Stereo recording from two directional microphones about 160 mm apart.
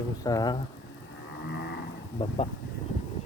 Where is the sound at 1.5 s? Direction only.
90° left.